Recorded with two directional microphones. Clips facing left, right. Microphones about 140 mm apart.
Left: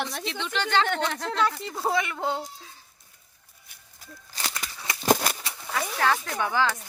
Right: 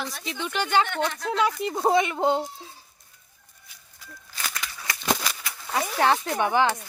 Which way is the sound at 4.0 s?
30° left (ahead or behind).